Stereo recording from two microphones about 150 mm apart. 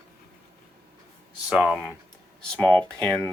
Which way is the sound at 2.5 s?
5° left (ahead or behind).